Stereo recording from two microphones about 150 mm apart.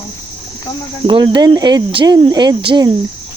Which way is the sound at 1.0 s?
30° right (ahead or behind).